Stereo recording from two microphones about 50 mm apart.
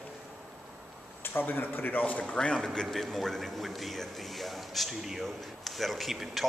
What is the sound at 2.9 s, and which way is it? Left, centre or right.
A man's voice, centre.